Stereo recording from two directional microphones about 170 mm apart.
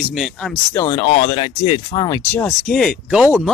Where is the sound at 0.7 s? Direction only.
20° left (ahead or behind).